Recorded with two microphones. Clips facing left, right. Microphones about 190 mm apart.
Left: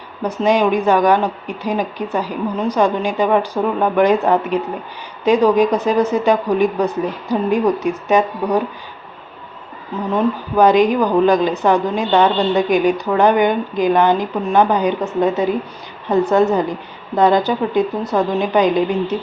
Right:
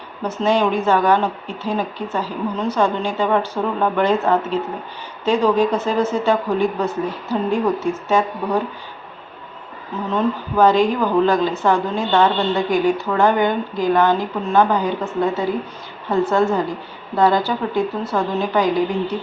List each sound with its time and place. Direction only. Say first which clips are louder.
0.2 s speech: left 3 dB; 15° left (ahead or behind)
10.1 s a woman's voice: left 2 dB; 15° left (ahead or behind)